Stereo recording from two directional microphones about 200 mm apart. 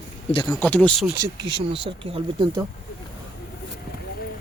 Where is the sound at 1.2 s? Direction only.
25° right (ahead or behind).